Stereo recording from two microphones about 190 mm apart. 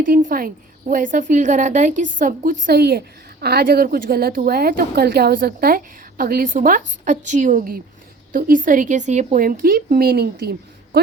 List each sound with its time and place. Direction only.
0.0 s a woman's voice: 45° right (ahead or behind)